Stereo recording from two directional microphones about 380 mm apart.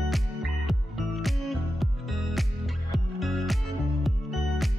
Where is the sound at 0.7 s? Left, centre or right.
Centre.